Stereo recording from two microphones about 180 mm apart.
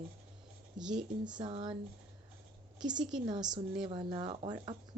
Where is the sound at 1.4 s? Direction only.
30° right (ahead or behind).